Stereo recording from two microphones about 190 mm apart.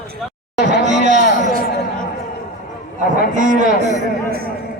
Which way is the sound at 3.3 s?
40° right (ahead or behind).